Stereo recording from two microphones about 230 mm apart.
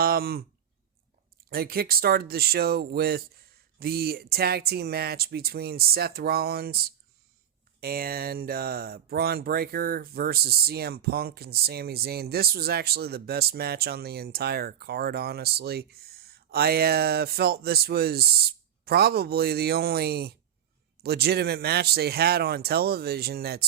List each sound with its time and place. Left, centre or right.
0.0 s speech: right
1.5 s speech: right